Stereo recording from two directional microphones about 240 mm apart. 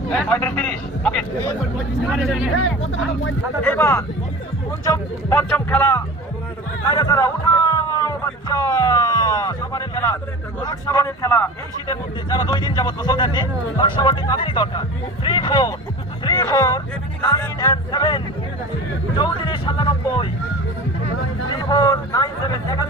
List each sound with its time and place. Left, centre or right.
0.1 s speech: centre
2.6 s speech: left
3.6 s speech: centre
21.7 s speech: centre